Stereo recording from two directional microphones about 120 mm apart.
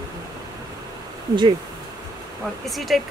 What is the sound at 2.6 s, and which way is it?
Speech, centre (ahead or behind).